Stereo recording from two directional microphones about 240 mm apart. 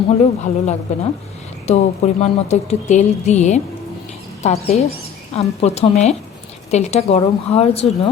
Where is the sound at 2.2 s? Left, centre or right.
Left.